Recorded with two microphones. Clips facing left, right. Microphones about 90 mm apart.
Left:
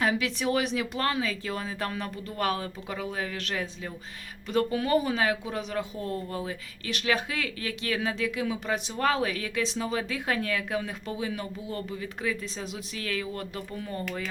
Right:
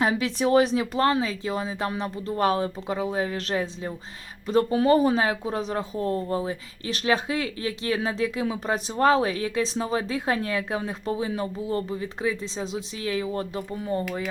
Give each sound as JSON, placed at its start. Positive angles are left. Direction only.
{"t": 0.0, "sound": "speech", "side_deg": -30}